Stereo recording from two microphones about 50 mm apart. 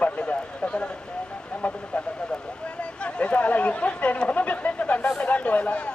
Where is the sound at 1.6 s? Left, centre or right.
Left.